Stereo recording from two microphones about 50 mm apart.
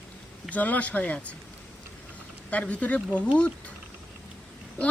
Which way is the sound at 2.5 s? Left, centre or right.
Left.